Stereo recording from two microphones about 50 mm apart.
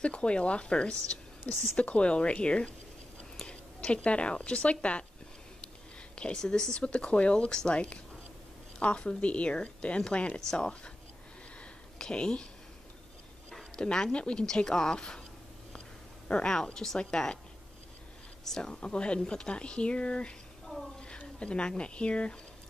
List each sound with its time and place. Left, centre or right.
0.0 s a woman's voice: left
6.3 s a woman's voice: centre
12.0 s speech: centre
13.7 s a woman's voice: centre
16.3 s a woman's voice: centre
18.4 s speech: centre
20.6 s a sound: centre
21.2 s speech: left